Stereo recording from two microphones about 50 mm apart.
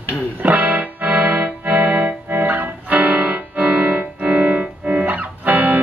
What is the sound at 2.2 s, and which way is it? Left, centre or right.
Music, right.